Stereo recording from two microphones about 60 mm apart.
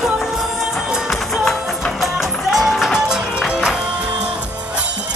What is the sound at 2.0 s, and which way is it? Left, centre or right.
Music, centre.